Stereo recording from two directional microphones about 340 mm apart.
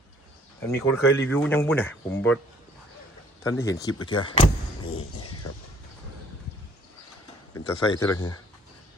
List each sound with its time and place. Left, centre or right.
0.9 s speech: centre
3.4 s speech: centre
4.9 s a sound: left
7.5 s speech: centre